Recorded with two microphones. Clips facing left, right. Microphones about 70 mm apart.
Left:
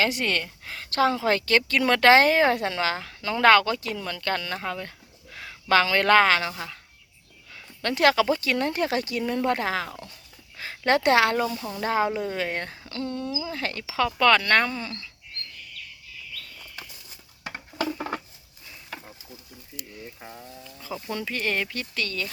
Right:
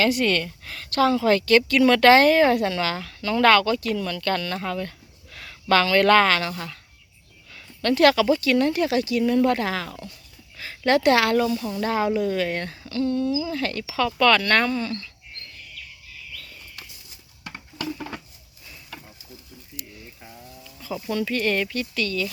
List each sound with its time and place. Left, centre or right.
0.0 s a woman's voice: left
17.8 s a sound: left
18.9 s stir: left
21.1 s a woman's voice: left
21.8 s speech: left